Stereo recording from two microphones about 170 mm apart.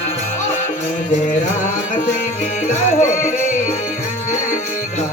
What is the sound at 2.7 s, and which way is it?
Music, 45° left (ahead or behind).